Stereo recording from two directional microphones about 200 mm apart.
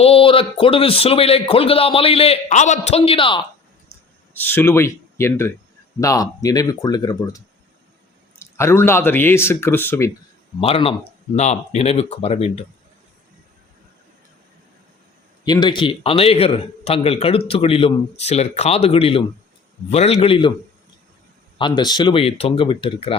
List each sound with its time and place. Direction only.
0.0 s a man's voice: 30° left (ahead or behind)
4.4 s speech: 10° left (ahead or behind)
10.6 s a man's voice: 30° left (ahead or behind)
15.4 s a man's voice: 20° left (ahead or behind)
21.6 s a man's voice: 20° left (ahead or behind)